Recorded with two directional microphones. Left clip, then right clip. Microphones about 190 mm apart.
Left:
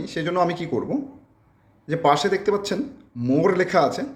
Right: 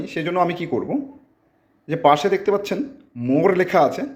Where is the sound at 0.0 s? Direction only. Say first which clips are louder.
Right 2 dB; 10° right (ahead or behind).